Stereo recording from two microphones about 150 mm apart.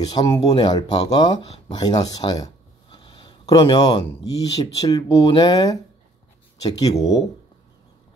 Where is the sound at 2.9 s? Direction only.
35° left (ahead or behind).